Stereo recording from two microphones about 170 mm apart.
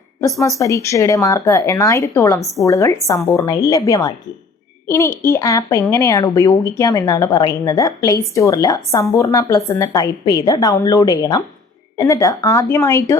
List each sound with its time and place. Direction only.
0.2 s a woman's voice: 20° left (ahead or behind)
2.4 s a woman's voice: centre (ahead or behind)
2.6 s a woman's voice: 20° left (ahead or behind)